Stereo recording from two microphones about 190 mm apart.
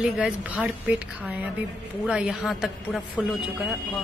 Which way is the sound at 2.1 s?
5° right (ahead or behind).